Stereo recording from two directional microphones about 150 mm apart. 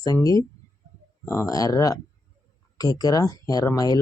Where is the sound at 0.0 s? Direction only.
25° left (ahead or behind).